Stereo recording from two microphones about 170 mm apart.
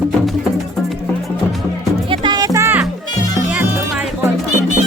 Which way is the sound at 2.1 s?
25° right (ahead or behind).